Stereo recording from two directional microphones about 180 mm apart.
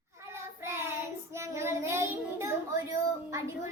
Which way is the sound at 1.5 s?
15° right (ahead or behind).